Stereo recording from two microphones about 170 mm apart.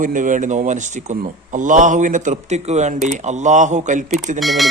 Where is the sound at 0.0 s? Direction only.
50° right (ahead or behind).